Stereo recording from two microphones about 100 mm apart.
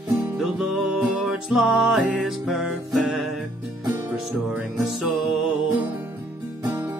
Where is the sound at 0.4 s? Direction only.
5° right (ahead or behind).